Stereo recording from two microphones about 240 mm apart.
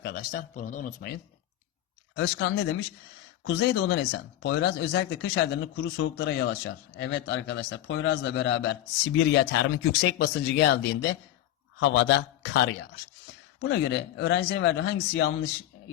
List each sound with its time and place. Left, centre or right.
0.0 s speech: left
2.1 s speech: left